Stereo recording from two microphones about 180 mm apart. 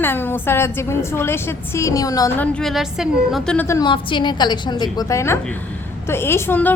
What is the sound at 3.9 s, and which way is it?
A woman's voice, 25° left (ahead or behind).